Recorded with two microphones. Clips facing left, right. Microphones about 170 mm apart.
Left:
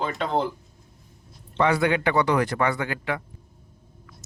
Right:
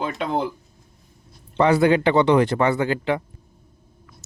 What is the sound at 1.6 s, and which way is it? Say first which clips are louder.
Speech: right 5 dB; 30° right (ahead or behind).